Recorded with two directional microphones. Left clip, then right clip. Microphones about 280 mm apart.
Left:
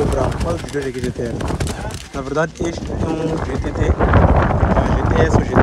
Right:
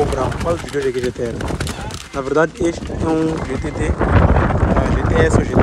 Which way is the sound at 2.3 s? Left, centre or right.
Centre.